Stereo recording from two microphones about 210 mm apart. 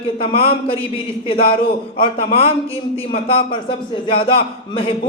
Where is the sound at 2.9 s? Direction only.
30° left (ahead or behind).